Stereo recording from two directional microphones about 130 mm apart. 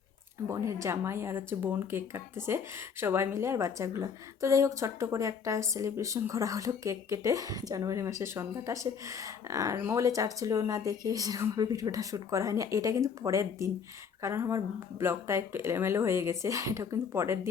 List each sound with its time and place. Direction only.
0.4 s a woman's voice: 25° right (ahead or behind)